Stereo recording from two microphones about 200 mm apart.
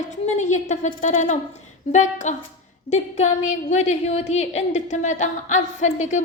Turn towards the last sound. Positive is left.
turn(degrees=35)  # may be behind; listen again after turning